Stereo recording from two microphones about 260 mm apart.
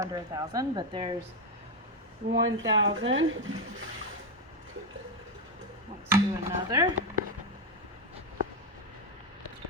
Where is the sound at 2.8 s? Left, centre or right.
Right.